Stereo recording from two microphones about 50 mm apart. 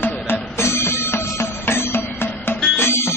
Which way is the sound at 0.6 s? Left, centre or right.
Left.